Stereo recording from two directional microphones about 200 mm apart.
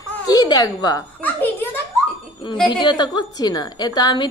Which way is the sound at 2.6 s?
25° left (ahead or behind).